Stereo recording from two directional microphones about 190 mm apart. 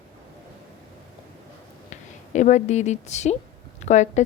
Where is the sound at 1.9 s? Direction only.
40° left (ahead or behind).